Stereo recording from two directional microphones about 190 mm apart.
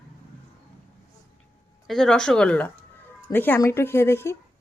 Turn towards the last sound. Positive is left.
turn(degrees=15)  # may be behind; listen again after turning